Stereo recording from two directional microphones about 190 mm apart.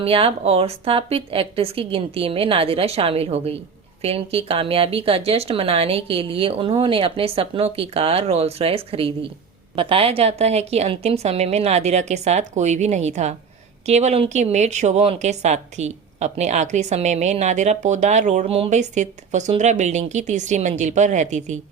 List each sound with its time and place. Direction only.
0.0 s a woman's voice: 30° right (ahead or behind)